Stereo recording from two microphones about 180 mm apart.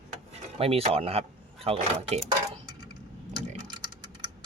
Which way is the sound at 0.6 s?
35° right (ahead or behind).